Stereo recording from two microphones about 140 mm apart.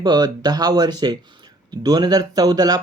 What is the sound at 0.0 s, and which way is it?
Speech, 30° right (ahead or behind).